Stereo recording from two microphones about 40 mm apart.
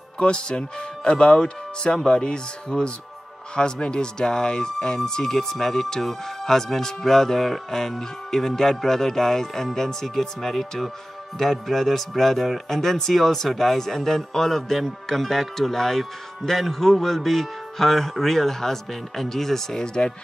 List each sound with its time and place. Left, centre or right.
0.2 s speech: left
19.8 s speech: centre